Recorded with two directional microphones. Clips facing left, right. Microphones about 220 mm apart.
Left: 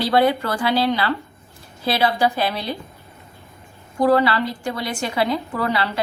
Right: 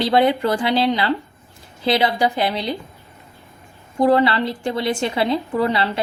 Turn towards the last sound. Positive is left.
turn(degrees=-25)  # may be behind; listen again after turning